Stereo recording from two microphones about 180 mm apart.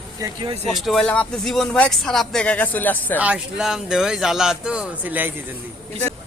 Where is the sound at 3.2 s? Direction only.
5° right (ahead or behind).